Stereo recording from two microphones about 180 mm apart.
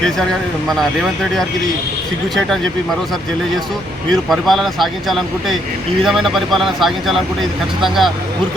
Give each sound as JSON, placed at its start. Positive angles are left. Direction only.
{"t": 4.1, "sound": "speech", "side_deg": 0}